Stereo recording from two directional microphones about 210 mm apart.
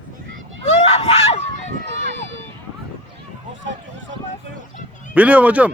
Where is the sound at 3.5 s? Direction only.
60° right (ahead or behind).